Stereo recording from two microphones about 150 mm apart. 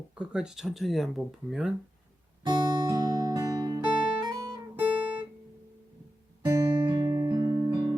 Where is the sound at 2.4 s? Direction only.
30° right (ahead or behind).